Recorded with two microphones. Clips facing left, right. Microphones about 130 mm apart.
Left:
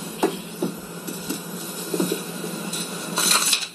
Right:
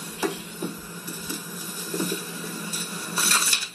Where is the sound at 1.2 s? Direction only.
20° left (ahead or behind).